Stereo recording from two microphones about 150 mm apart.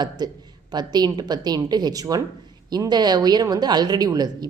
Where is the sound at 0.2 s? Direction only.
30° right (ahead or behind).